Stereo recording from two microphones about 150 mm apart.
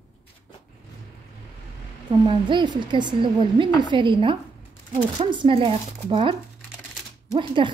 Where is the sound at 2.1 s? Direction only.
30° right (ahead or behind).